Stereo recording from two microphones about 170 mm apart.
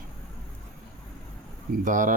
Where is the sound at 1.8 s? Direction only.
50° right (ahead or behind).